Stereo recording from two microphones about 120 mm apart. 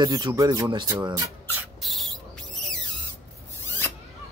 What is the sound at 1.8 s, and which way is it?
Rodents, centre (ahead or behind).